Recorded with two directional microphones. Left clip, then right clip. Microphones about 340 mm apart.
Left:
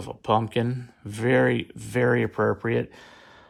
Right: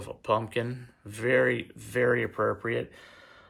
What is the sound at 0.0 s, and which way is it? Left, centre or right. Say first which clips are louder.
Speech: left 4 dB; centre.